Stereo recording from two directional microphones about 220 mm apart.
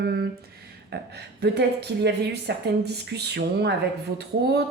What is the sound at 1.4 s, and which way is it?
A woman's voice, 50° right (ahead or behind).